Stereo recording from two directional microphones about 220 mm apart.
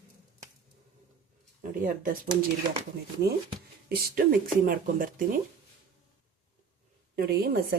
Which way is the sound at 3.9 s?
40° right (ahead or behind).